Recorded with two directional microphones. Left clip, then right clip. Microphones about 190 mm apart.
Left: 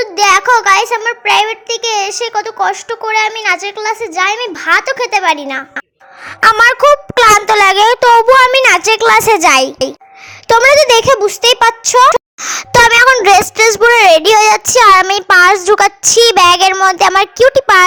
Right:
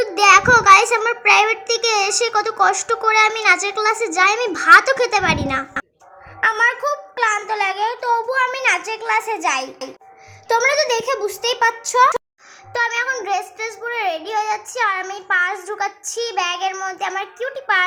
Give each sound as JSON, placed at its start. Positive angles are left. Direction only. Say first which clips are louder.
{"t": 0.0, "sound": "a child's voice", "louder": "left 3 dB", "side_deg": 20}
{"t": 6.5, "sound": "speech", "louder": "left 13 dB", "side_deg": 45}